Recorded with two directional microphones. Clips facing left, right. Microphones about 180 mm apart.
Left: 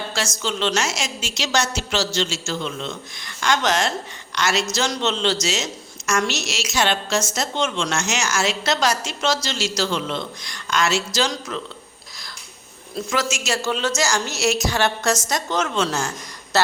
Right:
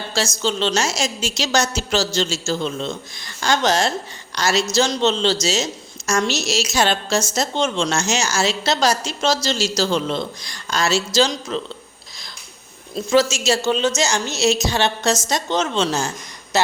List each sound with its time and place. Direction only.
0.4 s a woman's voice: 30° right (ahead or behind)
13.1 s a woman's voice: 25° right (ahead or behind)